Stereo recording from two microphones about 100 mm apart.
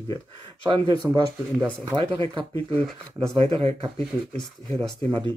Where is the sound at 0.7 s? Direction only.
45° right (ahead or behind).